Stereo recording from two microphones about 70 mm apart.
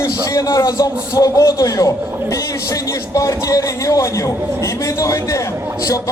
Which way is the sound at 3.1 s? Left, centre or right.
Left.